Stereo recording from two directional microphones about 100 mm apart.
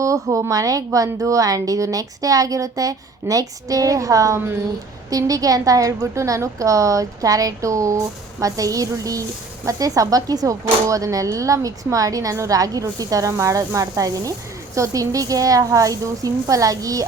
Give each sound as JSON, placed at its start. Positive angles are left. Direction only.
{"t": 0.0, "sound": "a woman's voice", "side_deg": -30}